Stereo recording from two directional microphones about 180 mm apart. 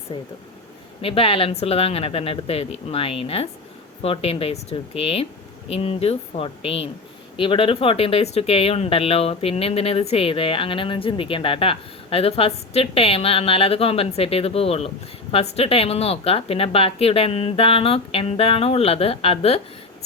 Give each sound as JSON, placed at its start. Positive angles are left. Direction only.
{"t": 0.1, "sound": "speech", "side_deg": 30}